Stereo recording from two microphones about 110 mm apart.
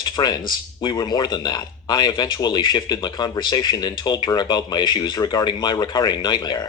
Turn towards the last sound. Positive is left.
turn(degrees=40)  # may be behind; listen again after turning